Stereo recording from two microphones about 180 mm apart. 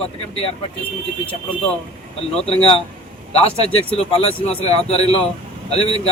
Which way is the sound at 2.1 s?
35° left (ahead or behind).